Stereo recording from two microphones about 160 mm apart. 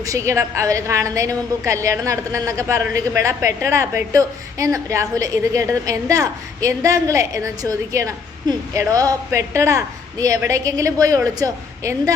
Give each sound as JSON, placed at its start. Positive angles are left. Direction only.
{"t": 0.0, "sound": "a woman's voice", "side_deg": -20}